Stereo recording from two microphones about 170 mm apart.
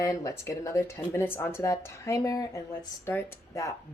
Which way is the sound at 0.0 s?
20° left (ahead or behind).